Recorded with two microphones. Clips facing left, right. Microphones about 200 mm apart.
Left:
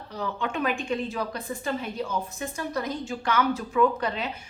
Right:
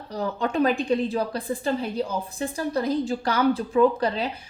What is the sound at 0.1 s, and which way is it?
A woman's voice, 40° right (ahead or behind).